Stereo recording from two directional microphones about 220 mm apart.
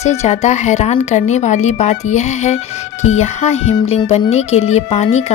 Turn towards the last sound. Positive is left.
turn(degrees=30)  # may be behind; listen again after turning